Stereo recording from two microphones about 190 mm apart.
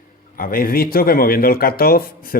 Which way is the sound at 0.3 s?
50° left (ahead or behind).